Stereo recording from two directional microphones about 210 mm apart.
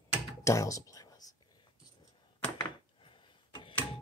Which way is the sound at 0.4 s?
15° left (ahead or behind).